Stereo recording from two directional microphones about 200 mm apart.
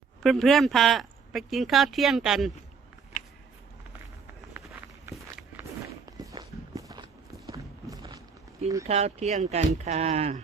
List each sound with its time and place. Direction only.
0.2 s speech: centre (ahead or behind)
5.0 s walk: 10° right (ahead or behind)
7.4 s a sound: 20° right (ahead or behind)
8.9 s speech: 30° right (ahead or behind)